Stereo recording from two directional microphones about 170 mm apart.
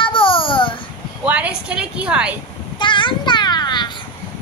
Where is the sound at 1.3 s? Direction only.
5° right (ahead or behind).